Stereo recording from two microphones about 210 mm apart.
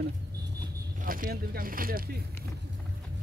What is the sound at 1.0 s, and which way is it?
Speech, 40° right (ahead or behind).